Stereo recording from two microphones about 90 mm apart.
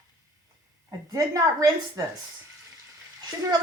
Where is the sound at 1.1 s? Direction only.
40° right (ahead or behind).